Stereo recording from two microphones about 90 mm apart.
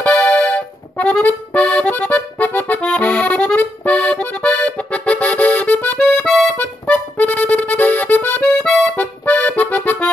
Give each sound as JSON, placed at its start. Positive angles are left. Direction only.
{"t": 0.0, "sound": "accordion", "side_deg": 15}
{"t": 6.2, "sound": "accordion", "side_deg": 5}
{"t": 6.6, "sound": "accordion", "side_deg": 15}